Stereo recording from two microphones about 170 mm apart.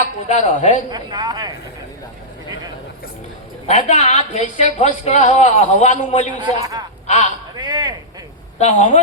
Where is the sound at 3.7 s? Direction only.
40° left (ahead or behind).